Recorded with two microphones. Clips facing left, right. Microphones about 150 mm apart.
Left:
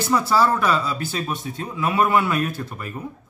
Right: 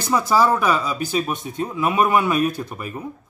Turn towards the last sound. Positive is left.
turn(degrees=-15)  # may be behind; listen again after turning